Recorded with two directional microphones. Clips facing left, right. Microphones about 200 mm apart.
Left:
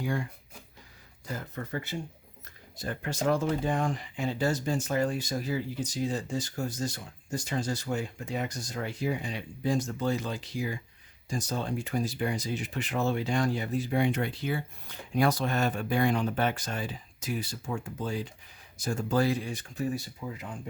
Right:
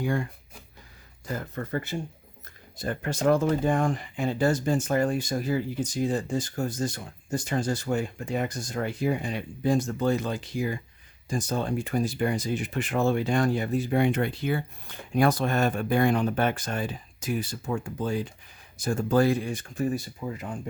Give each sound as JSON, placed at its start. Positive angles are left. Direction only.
{"t": 0.0, "sound": "speech", "side_deg": -55}
{"t": 1.3, "sound": "speech", "side_deg": -50}